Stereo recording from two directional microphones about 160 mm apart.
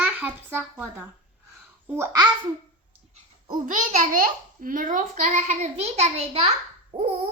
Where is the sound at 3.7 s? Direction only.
55° right (ahead or behind).